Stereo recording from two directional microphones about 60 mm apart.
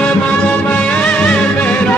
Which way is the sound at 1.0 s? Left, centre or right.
Left.